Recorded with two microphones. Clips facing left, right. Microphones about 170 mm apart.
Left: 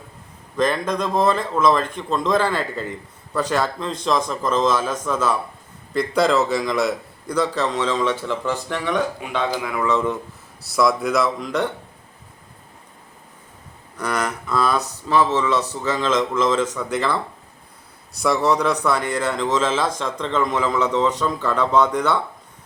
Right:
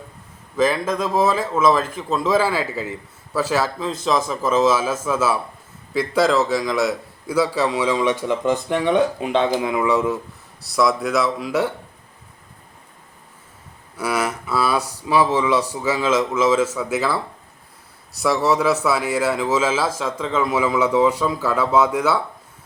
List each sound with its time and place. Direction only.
0.5 s a man's voice: 5° right (ahead or behind); by 9.8 s 25° right (ahead or behind)
9.8 s a man's voice: 10° right (ahead or behind)
13.9 s a man's voice: 5° right (ahead or behind)